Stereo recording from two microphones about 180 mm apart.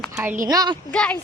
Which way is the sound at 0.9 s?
10° left (ahead or behind).